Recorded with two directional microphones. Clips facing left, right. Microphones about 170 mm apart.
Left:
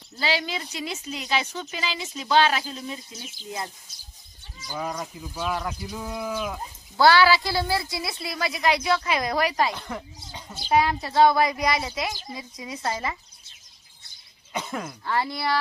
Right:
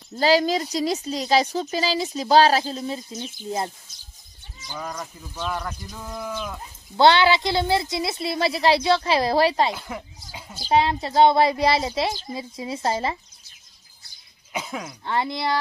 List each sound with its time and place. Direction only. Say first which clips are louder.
0.2 s speech: right 9 dB; 40° right (ahead or behind)
4.6 s speech: left 2 dB; 10° left (ahead or behind)
7.0 s speech: right 1 dB; 20° right (ahead or behind)
9.8 s speech: even; 10° right (ahead or behind)
10.5 s speech: right 2 dB; 30° right (ahead or behind)
14.5 s speech: even; 5° right (ahead or behind)
15.0 s speech: right 2 dB; 20° right (ahead or behind)